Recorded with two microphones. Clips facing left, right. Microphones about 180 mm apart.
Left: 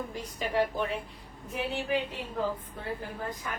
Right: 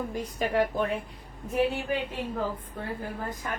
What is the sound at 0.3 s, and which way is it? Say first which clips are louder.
Speech: right 2 dB; 50° right (ahead or behind).